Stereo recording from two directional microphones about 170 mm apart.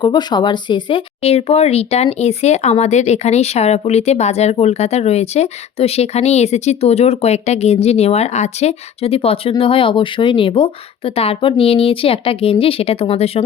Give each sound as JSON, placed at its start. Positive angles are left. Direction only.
{"t": 0.0, "sound": "speech", "side_deg": 25}